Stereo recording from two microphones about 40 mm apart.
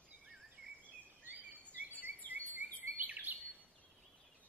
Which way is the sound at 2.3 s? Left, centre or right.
Right.